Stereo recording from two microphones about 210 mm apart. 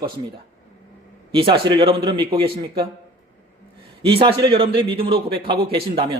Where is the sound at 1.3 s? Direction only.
25° right (ahead or behind).